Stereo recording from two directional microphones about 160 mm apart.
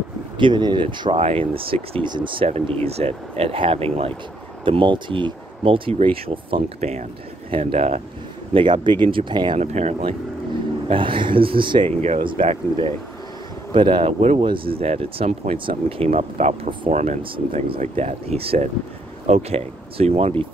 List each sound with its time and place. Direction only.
0.4 s speech: 30° right (ahead or behind)
9.6 s speech: 45° right (ahead or behind)
10.9 s speech: 30° right (ahead or behind)